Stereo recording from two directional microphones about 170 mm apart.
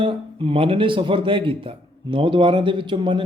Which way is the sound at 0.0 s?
30° right (ahead or behind).